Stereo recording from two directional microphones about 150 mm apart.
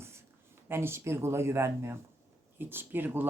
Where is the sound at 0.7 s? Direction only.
15° right (ahead or behind).